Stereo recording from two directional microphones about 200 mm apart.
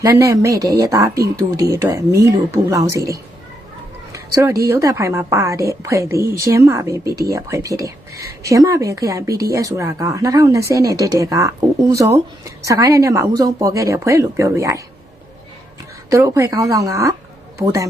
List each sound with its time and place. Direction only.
0.0 s a woman's voice: 15° right (ahead or behind)
4.1 s a sound: 15° right (ahead or behind)
4.6 s a woman's voice: 15° right (ahead or behind)
16.0 s a woman's voice: 15° right (ahead or behind)